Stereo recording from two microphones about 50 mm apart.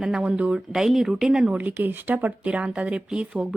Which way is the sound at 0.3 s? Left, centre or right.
Right.